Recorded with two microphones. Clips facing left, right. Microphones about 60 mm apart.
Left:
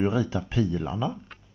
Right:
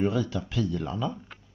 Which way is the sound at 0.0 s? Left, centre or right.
Centre.